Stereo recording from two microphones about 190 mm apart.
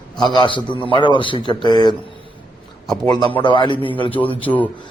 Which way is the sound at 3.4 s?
25° left (ahead or behind).